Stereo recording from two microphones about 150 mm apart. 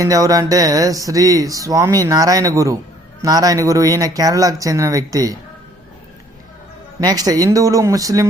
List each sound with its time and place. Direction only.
0.0 s speech: 25° right (ahead or behind)
7.0 s speech: 25° right (ahead or behind)